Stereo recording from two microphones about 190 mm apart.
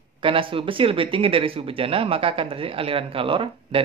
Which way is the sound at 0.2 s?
30° right (ahead or behind).